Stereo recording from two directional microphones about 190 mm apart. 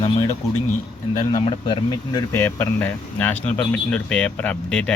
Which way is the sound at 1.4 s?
20° left (ahead or behind).